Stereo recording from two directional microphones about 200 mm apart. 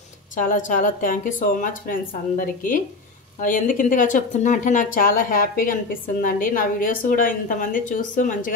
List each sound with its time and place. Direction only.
0.4 s a woman's voice: 40° left (ahead or behind)